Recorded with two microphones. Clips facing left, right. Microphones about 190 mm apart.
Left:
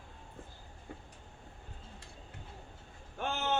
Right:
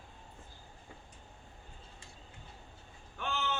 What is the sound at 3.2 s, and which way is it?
Vehicle, 45° left (ahead or behind).